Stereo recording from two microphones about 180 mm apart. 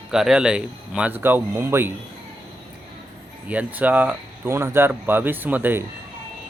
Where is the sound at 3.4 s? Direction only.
10° right (ahead or behind).